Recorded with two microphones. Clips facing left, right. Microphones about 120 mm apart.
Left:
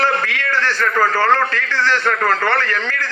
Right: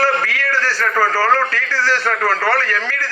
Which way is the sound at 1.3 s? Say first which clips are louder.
Even; 20° left (ahead or behind).